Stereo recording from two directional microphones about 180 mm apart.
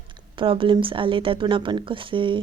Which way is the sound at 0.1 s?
30° right (ahead or behind).